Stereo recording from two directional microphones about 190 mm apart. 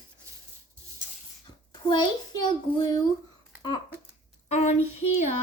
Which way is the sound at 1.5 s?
25° left (ahead or behind).